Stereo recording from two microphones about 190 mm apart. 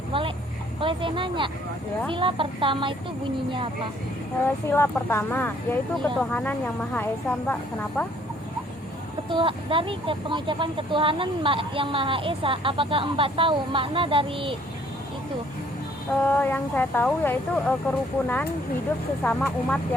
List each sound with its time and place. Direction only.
0.1 s a sound: 25° right (ahead or behind)
0.8 s speech: 25° right (ahead or behind)
4.7 s speech: 10° left (ahead or behind)
9.3 s speech: 25° right (ahead or behind)
16.2 s speech: 10° left (ahead or behind)
19.2 s speech: 5° left (ahead or behind)